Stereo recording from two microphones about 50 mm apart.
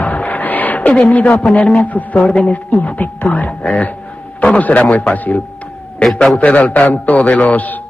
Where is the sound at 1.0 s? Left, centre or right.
Left.